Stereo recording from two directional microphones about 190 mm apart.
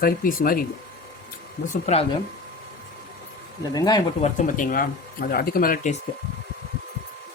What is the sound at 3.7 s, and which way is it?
Speech, 20° left (ahead or behind).